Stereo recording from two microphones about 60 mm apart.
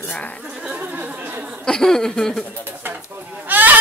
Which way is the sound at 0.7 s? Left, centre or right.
Right.